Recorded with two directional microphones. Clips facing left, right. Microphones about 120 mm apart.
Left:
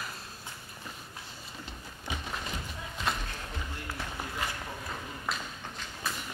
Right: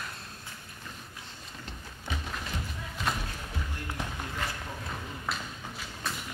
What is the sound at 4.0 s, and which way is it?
Run, 15° right (ahead or behind).